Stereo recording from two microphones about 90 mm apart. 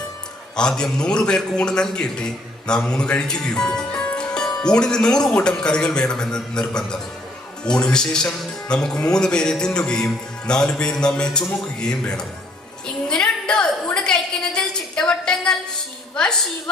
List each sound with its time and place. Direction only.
0.5 s a man's voice: 10° left (ahead or behind)
13.1 s a sound: 10° left (ahead or behind)
16.1 s a woman's voice: 10° left (ahead or behind)